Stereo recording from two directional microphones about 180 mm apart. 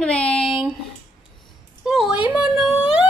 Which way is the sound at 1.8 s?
5° right (ahead or behind).